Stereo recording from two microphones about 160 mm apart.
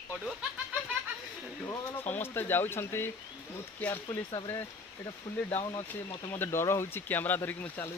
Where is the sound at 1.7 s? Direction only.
15° left (ahead or behind).